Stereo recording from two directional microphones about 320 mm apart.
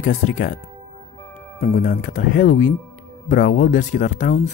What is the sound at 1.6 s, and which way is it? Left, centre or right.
Speech, left.